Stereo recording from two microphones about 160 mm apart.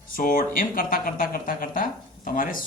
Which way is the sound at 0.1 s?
60° left (ahead or behind).